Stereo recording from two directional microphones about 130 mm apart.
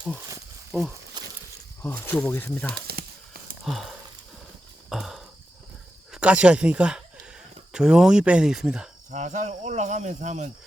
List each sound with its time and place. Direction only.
0.7 s speech: 15° right (ahead or behind)
1.2 s a sound: 35° right (ahead or behind)
1.8 s speech: 15° left (ahead or behind)
3.7 s speech: centre (ahead or behind)
4.9 s a sound: centre (ahead or behind)
6.1 s speech: 10° right (ahead or behind)
9.0 s speech: 70° right (ahead or behind)